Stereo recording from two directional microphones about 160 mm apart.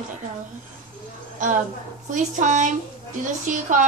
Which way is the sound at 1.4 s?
50° right (ahead or behind).